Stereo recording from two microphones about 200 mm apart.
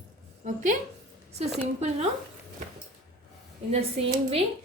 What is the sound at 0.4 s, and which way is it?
Speech, 40° right (ahead or behind).